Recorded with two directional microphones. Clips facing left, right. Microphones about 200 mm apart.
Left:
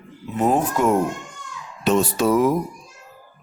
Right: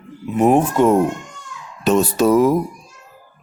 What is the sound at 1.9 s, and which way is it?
Speech, 40° right (ahead or behind).